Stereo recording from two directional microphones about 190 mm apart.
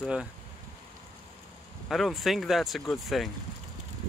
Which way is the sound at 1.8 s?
Centre (ahead or behind).